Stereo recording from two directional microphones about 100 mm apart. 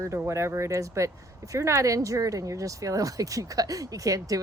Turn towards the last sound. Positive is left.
turn(degrees=-35)  # may be behind; listen again after turning